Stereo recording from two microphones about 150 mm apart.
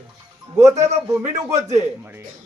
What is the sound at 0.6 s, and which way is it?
Speech, 50° right (ahead or behind).